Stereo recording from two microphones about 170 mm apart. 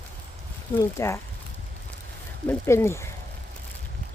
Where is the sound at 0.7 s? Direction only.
15° left (ahead or behind).